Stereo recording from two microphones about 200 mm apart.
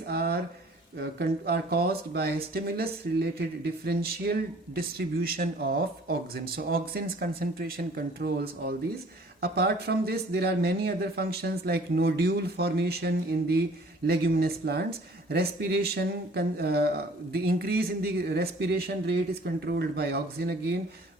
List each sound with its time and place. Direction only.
0.1 s speech: 50° right (ahead or behind)